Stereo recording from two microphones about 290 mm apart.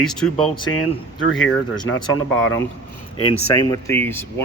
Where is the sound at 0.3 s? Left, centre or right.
Centre.